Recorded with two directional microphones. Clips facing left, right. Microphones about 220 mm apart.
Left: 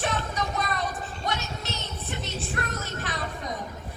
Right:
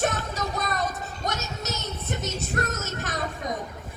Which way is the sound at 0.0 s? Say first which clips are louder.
Right 2 dB; 45° right (ahead or behind).